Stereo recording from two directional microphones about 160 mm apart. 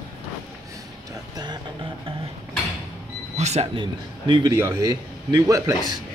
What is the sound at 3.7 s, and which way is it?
Speech, 30° right (ahead or behind).